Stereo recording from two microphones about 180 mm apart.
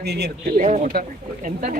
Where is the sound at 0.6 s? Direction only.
45° right (ahead or behind).